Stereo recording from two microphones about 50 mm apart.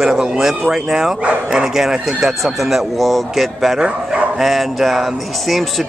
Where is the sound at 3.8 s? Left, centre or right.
Centre.